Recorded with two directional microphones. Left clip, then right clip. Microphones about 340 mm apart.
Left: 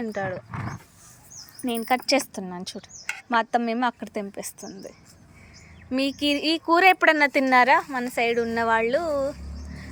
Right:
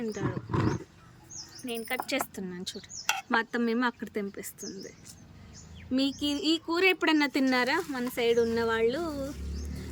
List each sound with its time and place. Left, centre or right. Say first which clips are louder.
0.0 s speech: left 6 dB; centre
1.6 s a woman's voice: left 10 dB; centre
6.1 s speech: left 7 dB; left
6.5 s speech: left 8 dB; centre